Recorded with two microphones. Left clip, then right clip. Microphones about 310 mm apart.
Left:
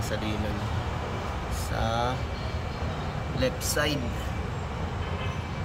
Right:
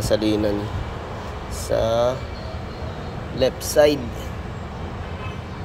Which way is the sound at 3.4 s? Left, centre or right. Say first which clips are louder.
Right 11 dB; centre.